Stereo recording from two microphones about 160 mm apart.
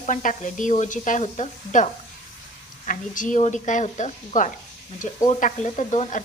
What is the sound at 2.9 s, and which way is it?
Speech, 55° left (ahead or behind).